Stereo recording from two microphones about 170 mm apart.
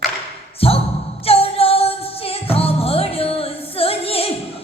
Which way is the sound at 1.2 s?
35° left (ahead or behind).